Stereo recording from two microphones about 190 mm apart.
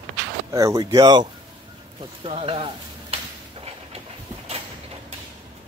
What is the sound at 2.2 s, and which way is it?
Speech, 30° right (ahead or behind).